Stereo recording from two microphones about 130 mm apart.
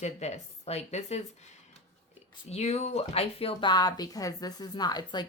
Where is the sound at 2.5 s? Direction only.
55° left (ahead or behind).